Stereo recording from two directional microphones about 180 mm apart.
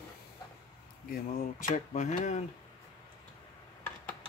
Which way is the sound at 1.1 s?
45° left (ahead or behind).